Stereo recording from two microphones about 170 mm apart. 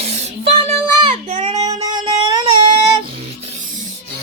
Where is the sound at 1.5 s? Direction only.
20° right (ahead or behind).